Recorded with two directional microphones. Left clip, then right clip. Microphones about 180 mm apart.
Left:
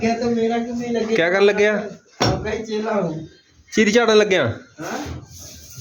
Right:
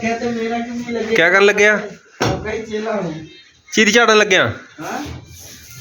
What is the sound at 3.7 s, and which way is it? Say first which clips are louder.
Speech: right 4 dB; 5° left (ahead or behind).